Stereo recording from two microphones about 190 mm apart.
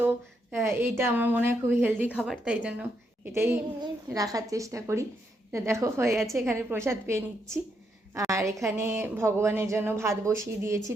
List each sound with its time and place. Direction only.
0.6 s a woman's voice: 15° right (ahead or behind)